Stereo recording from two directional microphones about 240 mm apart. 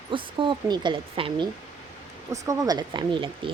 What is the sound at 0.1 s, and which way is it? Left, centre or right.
Speech, centre.